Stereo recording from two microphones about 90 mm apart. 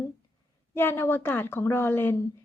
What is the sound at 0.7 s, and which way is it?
A woman's voice, 25° left (ahead or behind).